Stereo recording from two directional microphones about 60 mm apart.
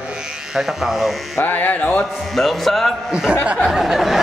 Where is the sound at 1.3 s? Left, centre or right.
Left.